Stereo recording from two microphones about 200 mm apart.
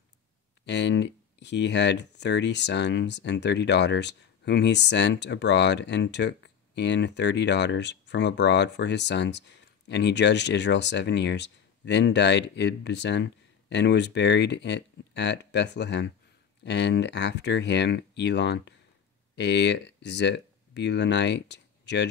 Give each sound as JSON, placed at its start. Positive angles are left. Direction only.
{"t": 0.7, "sound": "speech", "side_deg": 60}